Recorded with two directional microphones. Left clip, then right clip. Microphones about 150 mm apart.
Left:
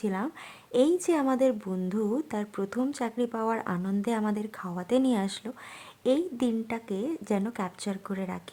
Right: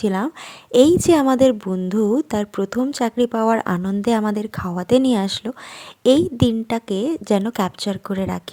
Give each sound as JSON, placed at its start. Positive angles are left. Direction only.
{"t": 0.0, "sound": "speech", "side_deg": -35}